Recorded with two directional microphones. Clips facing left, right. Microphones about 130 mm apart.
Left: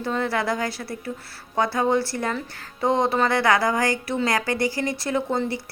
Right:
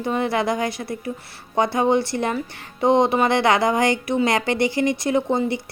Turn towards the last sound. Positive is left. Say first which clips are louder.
# right 4 dB
turn(degrees=-20)  # may be behind; listen again after turning